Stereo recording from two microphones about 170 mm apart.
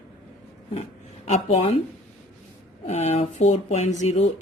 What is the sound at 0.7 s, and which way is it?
Speech, 40° left (ahead or behind).